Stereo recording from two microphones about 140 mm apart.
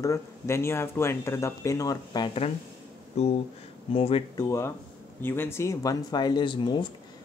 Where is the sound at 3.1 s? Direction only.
50° left (ahead or behind).